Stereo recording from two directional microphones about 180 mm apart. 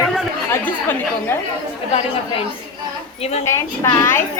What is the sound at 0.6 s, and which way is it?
Speech, 10° left (ahead or behind).